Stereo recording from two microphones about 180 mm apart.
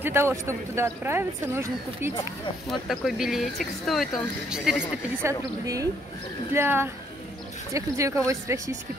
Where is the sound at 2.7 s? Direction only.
Centre (ahead or behind).